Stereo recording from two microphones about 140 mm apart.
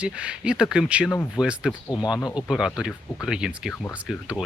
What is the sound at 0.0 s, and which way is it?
Speech, 5° right (ahead or behind).